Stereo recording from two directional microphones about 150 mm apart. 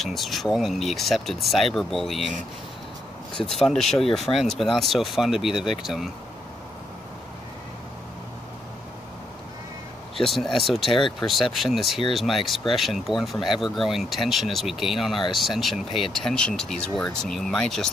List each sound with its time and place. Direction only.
0.0 s speech: centre (ahead or behind)
3.3 s speech: 5° left (ahead or behind)
10.1 s speech: centre (ahead or behind)
10.9 s speech: 35° left (ahead or behind)
11.1 s speech: centre (ahead or behind)